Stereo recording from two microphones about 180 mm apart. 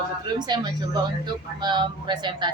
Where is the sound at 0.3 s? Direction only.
25° right (ahead or behind).